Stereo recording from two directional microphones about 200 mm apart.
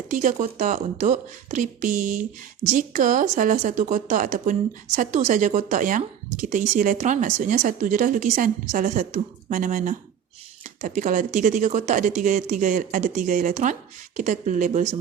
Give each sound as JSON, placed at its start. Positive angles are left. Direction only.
{"t": 0.1, "sound": "speech", "side_deg": -40}